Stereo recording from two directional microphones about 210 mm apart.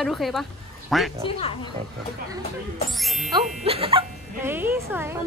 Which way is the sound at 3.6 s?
25° right (ahead or behind).